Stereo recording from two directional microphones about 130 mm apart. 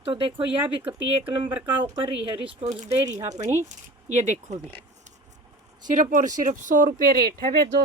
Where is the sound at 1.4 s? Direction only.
40° right (ahead or behind).